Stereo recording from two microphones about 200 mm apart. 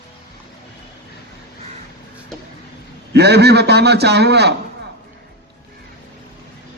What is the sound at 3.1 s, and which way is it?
A man's voice, 55° right (ahead or behind).